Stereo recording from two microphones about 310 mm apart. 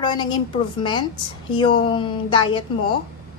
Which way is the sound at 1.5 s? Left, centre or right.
Centre.